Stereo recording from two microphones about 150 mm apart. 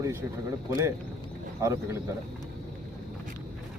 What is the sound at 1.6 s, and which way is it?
Speech, 20° right (ahead or behind).